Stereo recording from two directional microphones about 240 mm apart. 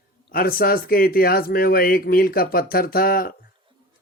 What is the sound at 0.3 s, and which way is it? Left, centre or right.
Speech, left.